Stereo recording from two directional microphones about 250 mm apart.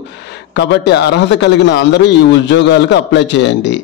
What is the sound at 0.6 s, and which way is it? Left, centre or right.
A man's voice, left.